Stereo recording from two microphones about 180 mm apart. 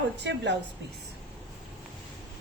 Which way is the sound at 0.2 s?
75° right (ahead or behind).